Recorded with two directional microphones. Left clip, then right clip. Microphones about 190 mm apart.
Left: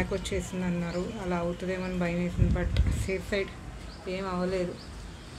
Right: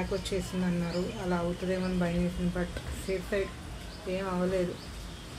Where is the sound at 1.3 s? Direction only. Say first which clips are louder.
Even; 25° left (ahead or behind).